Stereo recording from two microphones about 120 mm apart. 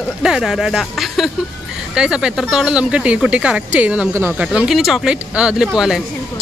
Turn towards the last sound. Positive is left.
turn(degrees=-5)  # may be behind; listen again after turning